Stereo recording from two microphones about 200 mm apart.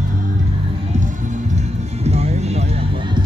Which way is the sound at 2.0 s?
30° right (ahead or behind).